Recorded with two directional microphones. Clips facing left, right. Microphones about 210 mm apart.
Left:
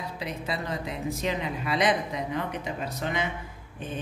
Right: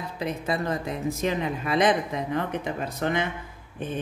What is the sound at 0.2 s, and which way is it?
Speech, 50° right (ahead or behind).